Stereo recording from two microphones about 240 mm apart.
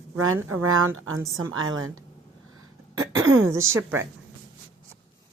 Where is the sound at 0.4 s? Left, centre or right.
Right.